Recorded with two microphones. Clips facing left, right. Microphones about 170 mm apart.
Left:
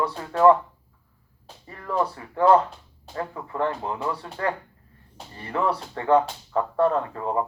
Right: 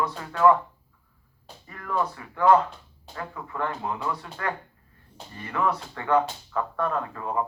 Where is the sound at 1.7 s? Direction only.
30° left (ahead or behind).